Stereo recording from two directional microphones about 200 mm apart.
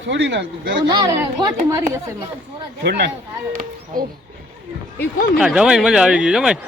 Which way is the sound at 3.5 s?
45° right (ahead or behind).